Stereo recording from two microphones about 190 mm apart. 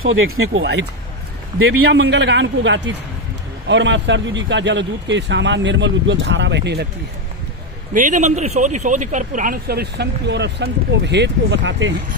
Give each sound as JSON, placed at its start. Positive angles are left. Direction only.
{"t": 0.0, "sound": "speech", "side_deg": -90}
{"t": 1.9, "sound": "speech", "side_deg": -65}
{"t": 7.9, "sound": "speech", "side_deg": -40}